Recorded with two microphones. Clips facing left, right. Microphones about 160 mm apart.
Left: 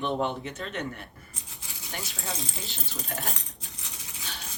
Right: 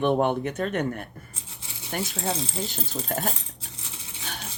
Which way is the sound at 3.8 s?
30° right (ahead or behind).